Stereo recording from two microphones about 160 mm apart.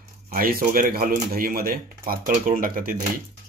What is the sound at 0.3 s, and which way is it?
Speech, 65° right (ahead or behind).